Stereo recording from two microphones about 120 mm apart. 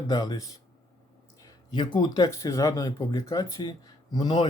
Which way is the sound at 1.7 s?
40° left (ahead or behind).